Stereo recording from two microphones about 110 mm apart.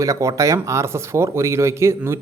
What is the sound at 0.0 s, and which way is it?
Speech, 30° right (ahead or behind).